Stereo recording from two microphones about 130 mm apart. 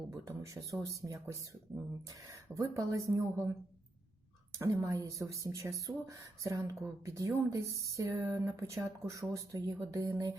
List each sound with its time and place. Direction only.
0.1 s speech: 25° right (ahead or behind)
4.5 s speech: 25° right (ahead or behind)